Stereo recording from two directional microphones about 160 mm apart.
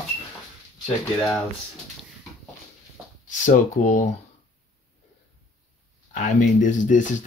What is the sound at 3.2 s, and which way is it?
Speech, 50° left (ahead or behind).